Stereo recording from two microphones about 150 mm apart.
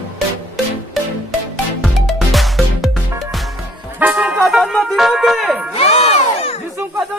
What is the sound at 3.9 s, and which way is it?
Music, 10° right (ahead or behind).